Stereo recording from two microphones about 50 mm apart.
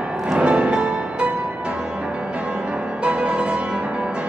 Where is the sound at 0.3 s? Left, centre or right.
Right.